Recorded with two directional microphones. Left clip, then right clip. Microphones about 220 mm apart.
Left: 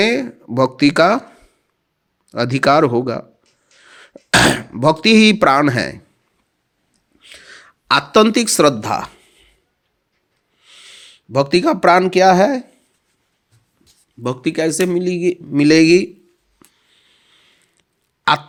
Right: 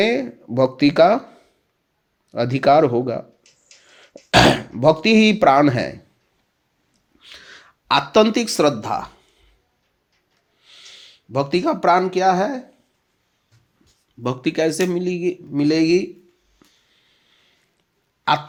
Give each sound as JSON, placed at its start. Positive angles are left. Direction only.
{"t": 0.0, "sound": "speech", "side_deg": 15}
{"t": 7.2, "sound": "a sound", "side_deg": 10}
{"t": 10.6, "sound": "speech", "side_deg": 15}
{"t": 14.2, "sound": "a man's voice", "side_deg": 10}
{"t": 16.6, "sound": "a sound", "side_deg": 25}
{"t": 18.3, "sound": "a man's voice", "side_deg": 30}